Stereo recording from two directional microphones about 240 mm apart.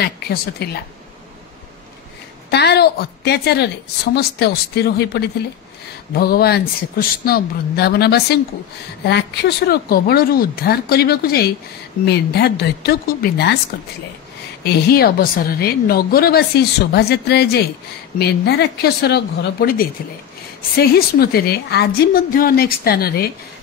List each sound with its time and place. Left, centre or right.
0.0 s a woman's voice: left
2.5 s a woman's voice: left
14.6 s a woman's voice: left